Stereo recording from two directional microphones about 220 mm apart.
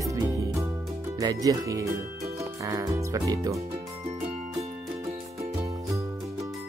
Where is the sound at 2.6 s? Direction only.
15° right (ahead or behind).